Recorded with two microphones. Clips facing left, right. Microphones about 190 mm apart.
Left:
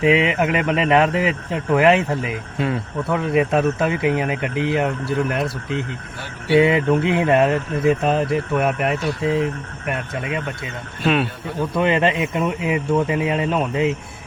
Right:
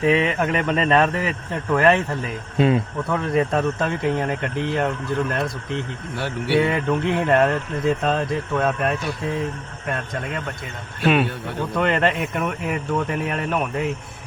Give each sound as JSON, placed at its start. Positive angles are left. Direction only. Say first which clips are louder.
{"t": 0.0, "sound": "speech", "louder": "left 2 dB", "side_deg": 10}
{"t": 2.6, "sound": "speech", "louder": "right 5 dB", "side_deg": -20}
{"t": 3.1, "sound": "speech", "louder": "left 3 dB", "side_deg": 10}
{"t": 9.2, "sound": "speech", "louder": "left 7 dB", "side_deg": 80}
{"t": 9.8, "sound": "speech", "louder": "left 1 dB", "side_deg": 10}
{"t": 11.0, "sound": "a man's voice", "louder": "right 1 dB", "side_deg": 0}
{"t": 11.8, "sound": "speech", "louder": "left 2 dB", "side_deg": 10}